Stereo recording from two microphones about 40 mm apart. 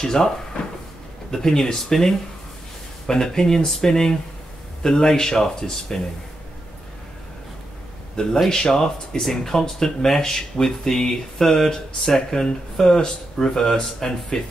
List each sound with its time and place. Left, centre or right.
0.0 s speech: centre
1.3 s speech: centre
8.5 s speech: centre